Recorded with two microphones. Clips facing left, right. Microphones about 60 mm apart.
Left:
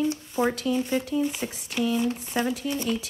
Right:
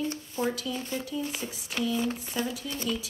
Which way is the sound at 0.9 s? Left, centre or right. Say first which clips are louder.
Left 7 dB; left.